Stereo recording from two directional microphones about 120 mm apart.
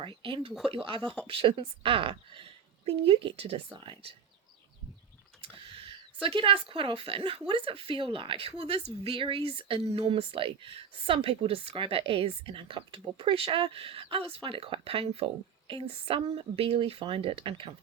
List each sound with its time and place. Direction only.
0.0 s speech: 45° right (ahead or behind)
5.4 s speech: 55° right (ahead or behind)